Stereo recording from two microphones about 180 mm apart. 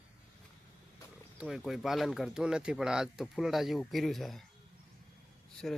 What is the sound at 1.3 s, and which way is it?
Speech, centre (ahead or behind).